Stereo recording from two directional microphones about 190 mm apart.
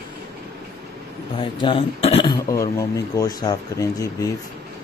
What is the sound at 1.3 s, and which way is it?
Speech, 25° left (ahead or behind).